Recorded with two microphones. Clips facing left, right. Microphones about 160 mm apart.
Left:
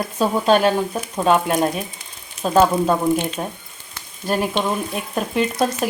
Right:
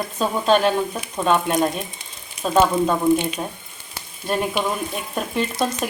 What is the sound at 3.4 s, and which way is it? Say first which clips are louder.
Speech: left 2 dB; 10° left (ahead or behind).